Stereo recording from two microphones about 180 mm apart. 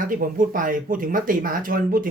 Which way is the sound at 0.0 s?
50° right (ahead or behind).